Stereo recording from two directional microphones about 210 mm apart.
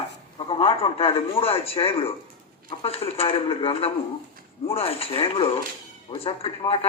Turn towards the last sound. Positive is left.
turn(degrees=25)  # may be behind; listen again after turning